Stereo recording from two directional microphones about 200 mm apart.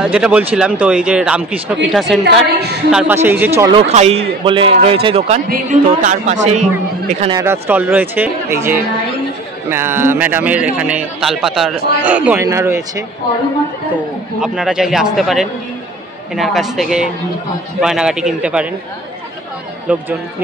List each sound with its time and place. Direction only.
0.0 s a man's voice: 5° right (ahead or behind)
3.7 s a woman's voice: 35° right (ahead or behind)
7.2 s a man's voice: 20° right (ahead or behind)
14.4 s speech: 5° right (ahead or behind)
19.9 s a man's voice: 10° right (ahead or behind)